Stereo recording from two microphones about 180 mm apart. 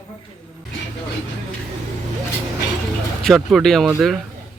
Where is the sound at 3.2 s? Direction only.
Centre (ahead or behind).